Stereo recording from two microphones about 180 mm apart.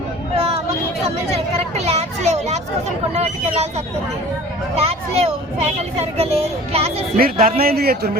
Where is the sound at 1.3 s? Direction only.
35° right (ahead or behind).